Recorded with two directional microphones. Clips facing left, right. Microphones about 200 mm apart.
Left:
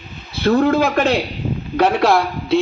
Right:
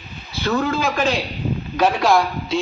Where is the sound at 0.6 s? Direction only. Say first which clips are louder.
Left 5 dB; 60° left (ahead or behind).